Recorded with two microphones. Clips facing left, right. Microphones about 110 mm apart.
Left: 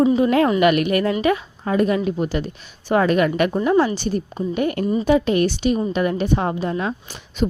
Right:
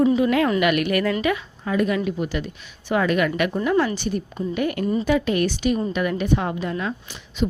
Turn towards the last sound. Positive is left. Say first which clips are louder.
# left 2 dB
turn(degrees=40)  # may be behind; listen again after turning